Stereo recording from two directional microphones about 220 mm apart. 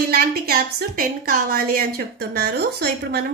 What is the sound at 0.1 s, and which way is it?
A woman's voice, 45° right (ahead or behind).